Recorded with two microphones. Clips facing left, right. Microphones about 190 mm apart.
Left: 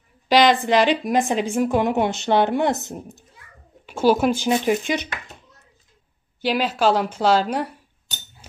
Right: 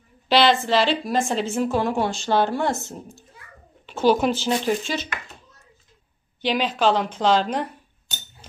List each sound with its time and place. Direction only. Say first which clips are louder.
0.3 s a woman's voice: left 2 dB; 15° left (ahead or behind)
6.4 s a woman's voice: left 1 dB; 10° left (ahead or behind)